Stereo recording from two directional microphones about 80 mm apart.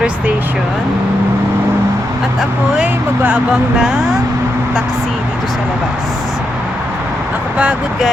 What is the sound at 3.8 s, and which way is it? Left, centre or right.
Speech, centre.